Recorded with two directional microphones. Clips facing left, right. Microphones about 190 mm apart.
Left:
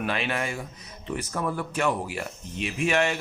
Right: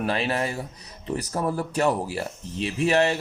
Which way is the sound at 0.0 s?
35° right (ahead or behind).